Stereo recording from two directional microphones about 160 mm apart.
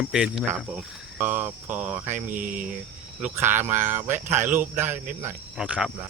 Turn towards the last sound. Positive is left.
turn(degrees=-5)  # may be behind; listen again after turning